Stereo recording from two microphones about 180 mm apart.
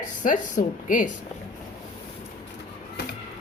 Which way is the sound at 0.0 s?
45° left (ahead or behind).